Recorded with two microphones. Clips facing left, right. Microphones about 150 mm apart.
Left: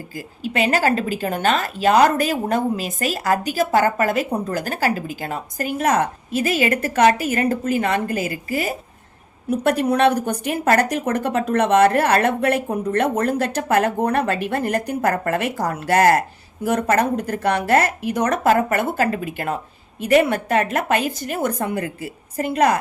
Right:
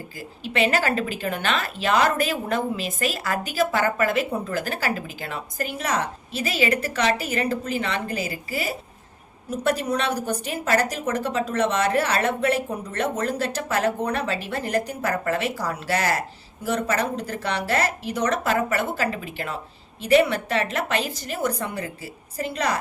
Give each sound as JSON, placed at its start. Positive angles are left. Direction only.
{"t": 0.2, "sound": "a woman's voice", "side_deg": 45}